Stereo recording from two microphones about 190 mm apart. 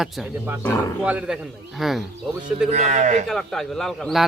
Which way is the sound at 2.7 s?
40° right (ahead or behind).